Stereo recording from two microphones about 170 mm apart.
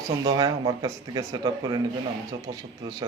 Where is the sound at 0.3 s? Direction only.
20° right (ahead or behind).